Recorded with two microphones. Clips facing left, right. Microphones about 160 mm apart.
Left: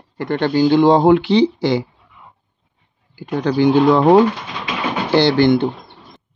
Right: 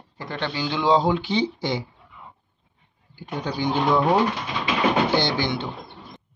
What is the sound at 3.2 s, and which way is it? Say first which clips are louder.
Speech: left 11 dB; 90° left.